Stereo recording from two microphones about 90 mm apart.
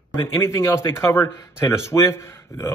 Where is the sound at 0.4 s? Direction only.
30° left (ahead or behind).